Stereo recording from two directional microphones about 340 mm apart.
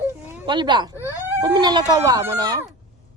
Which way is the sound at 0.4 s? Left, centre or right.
Centre.